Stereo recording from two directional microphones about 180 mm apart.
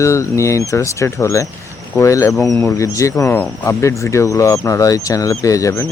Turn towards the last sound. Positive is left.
turn(degrees=15)  # may be behind; listen again after turning